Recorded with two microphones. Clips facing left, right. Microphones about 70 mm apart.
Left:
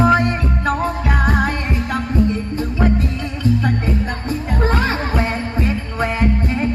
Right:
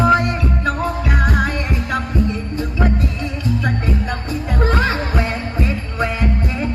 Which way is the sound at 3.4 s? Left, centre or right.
Left.